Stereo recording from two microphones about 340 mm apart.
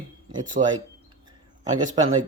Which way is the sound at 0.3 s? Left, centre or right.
Centre.